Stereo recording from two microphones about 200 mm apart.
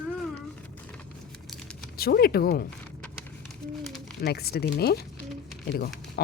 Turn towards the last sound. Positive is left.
turn(degrees=50)  # may be behind; listen again after turning